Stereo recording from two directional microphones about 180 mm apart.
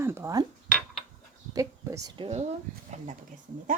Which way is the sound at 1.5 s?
20° right (ahead or behind).